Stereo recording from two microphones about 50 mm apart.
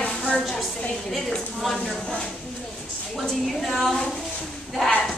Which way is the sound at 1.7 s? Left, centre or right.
Centre.